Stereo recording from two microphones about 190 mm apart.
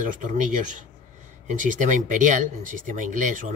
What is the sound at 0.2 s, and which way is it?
Speech, 40° right (ahead or behind).